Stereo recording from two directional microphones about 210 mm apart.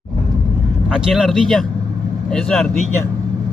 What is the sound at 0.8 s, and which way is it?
Speech, 5° right (ahead or behind).